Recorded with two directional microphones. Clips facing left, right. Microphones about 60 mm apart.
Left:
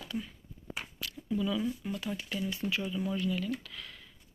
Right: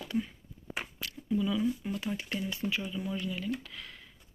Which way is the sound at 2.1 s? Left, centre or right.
Right.